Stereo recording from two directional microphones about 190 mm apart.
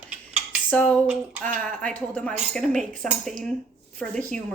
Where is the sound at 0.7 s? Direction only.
10° left (ahead or behind).